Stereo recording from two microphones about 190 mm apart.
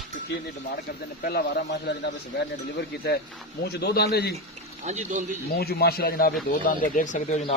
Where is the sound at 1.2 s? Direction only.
55° left (ahead or behind).